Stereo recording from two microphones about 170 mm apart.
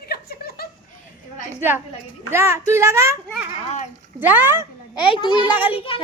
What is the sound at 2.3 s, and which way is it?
A child's voice, 15° right (ahead or behind).